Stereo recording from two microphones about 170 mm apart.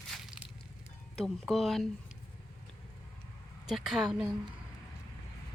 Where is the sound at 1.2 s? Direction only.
Centre (ahead or behind).